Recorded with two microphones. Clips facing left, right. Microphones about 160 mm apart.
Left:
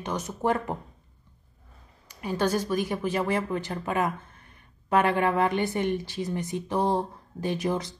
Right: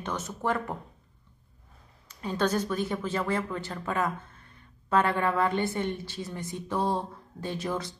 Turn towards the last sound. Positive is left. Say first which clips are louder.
# left 4 dB
turn(degrees=20)  # may be behind; listen again after turning